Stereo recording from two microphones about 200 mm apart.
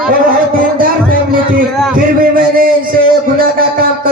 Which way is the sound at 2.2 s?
45° right (ahead or behind).